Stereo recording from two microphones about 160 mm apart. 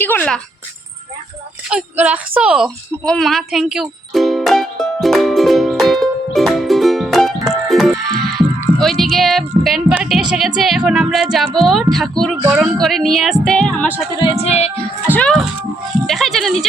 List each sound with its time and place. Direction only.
0.0 s speech: 10° left (ahead or behind)
1.7 s a sound: 10° right (ahead or behind)
7.7 s music: centre (ahead or behind)
9.6 s speech: centre (ahead or behind)
14.2 s music: 40° left (ahead or behind)
15.0 s speech: 10° left (ahead or behind)